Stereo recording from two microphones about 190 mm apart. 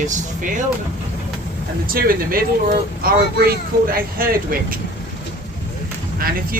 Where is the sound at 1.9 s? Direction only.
50° right (ahead or behind).